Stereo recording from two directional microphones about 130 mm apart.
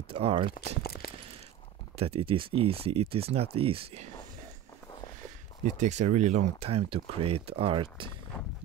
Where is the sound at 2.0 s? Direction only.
45° right (ahead or behind).